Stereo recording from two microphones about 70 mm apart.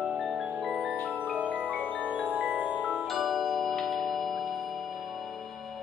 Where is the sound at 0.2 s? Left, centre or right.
Centre.